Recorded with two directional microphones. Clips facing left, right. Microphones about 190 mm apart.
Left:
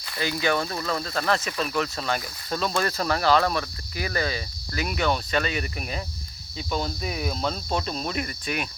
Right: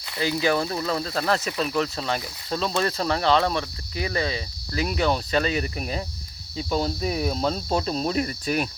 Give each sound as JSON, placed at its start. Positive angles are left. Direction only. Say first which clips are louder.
{"t": 0.2, "sound": "speech", "louder": "right 3 dB", "side_deg": -30}
{"t": 0.6, "sound": "speech", "louder": "right 2 dB", "side_deg": -15}
{"t": 6.6, "sound": "cricket", "louder": "right 4 dB", "side_deg": -35}